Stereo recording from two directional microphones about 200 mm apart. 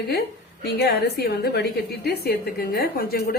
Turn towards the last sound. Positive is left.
turn(degrees=50)  # may be behind; listen again after turning